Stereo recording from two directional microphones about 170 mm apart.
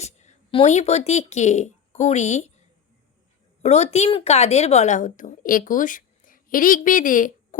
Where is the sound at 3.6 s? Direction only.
40° left (ahead or behind).